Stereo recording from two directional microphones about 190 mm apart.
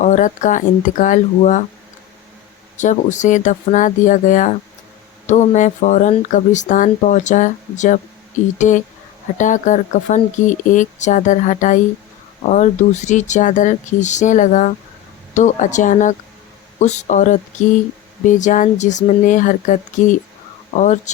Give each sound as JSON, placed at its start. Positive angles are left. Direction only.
{"t": 0.0, "sound": "speech", "side_deg": 40}
{"t": 2.7, "sound": "speech", "side_deg": 40}